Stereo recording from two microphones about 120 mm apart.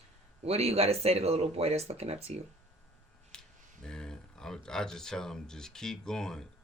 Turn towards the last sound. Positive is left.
turn(degrees=5)  # may be behind; listen again after turning